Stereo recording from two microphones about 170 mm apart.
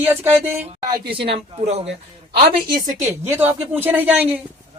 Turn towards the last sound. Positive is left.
turn(degrees=-10)  # may be behind; listen again after turning